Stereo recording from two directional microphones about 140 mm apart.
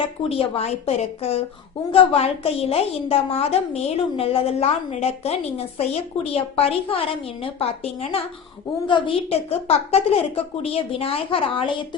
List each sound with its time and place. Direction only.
0.3 s a woman's voice: 45° left (ahead or behind)